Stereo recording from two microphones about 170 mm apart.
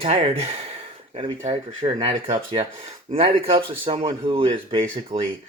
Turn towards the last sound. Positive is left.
turn(degrees=-35)  # may be behind; listen again after turning